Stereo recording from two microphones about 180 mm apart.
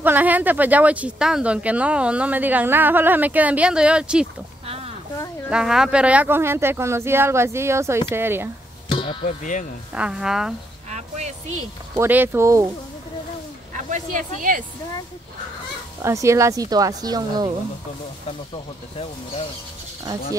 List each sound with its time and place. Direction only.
0.0 s speech: 10° right (ahead or behind)
4.6 s a sound: 35° right (ahead or behind)
5.5 s speech: 5° right (ahead or behind)
8.9 s music: 25° left (ahead or behind)
9.2 s speech: 40° left (ahead or behind)
9.9 s a woman's voice: 5° right (ahead or behind)
10.9 s music: 40° right (ahead or behind)
11.9 s speech: 10° right (ahead or behind)
13.7 s speech: 45° right (ahead or behind)
16.0 s speech: 15° right (ahead or behind)